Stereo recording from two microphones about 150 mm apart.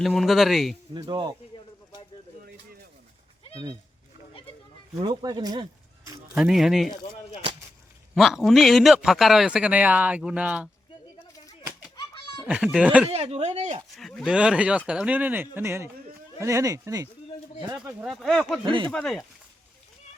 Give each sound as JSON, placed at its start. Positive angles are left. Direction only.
{"t": 0.0, "sound": "a man's voice", "side_deg": 0}
{"t": 0.9, "sound": "speech", "side_deg": -30}
{"t": 4.9, "sound": "speech", "side_deg": -30}
{"t": 6.3, "sound": "a man's voice", "side_deg": -5}
{"t": 8.1, "sound": "a man's voice", "side_deg": 0}
{"t": 11.9, "sound": "a sound", "side_deg": 30}
{"t": 12.5, "sound": "speech", "side_deg": -5}
{"t": 13.1, "sound": "speech", "side_deg": -40}
{"t": 13.9, "sound": "speech", "side_deg": 0}
{"t": 18.0, "sound": "a man's voice", "side_deg": 0}
{"t": 18.6, "sound": "speech", "side_deg": -30}
{"t": 18.9, "sound": "a man's voice", "side_deg": 5}